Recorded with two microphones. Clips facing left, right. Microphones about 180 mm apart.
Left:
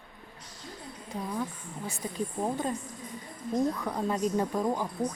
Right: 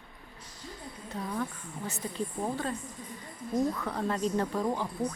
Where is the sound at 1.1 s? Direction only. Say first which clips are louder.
Left 1 dB; 10° left (ahead or behind).